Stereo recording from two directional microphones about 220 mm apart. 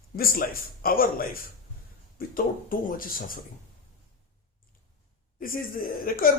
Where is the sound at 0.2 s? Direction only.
40° left (ahead or behind).